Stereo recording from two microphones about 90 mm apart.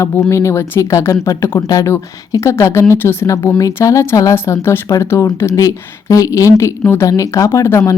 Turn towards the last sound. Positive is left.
turn(degrees=30)  # may be behind; listen again after turning